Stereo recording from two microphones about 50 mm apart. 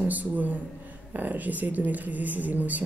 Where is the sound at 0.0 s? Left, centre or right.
Right.